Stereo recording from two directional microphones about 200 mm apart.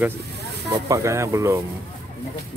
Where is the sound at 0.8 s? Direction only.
15° right (ahead or behind).